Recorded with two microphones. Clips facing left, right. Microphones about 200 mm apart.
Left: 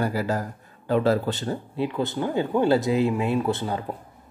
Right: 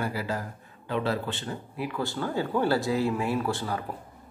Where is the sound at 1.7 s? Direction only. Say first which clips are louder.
Left 5 dB; 25° left (ahead or behind).